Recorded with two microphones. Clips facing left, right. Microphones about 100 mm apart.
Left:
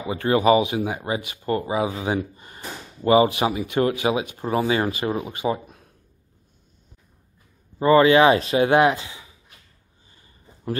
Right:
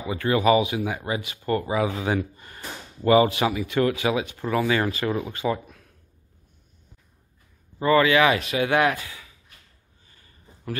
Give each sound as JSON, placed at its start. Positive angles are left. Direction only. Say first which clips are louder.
{"t": 0.1, "sound": "speech", "louder": "left 2 dB", "side_deg": 30}
{"t": 7.8, "sound": "speech", "louder": "left 4 dB", "side_deg": 30}
{"t": 10.1, "sound": "a sound", "louder": "left 1 dB", "side_deg": 25}